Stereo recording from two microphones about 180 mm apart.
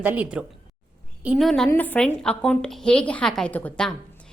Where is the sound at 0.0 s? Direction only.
10° right (ahead or behind).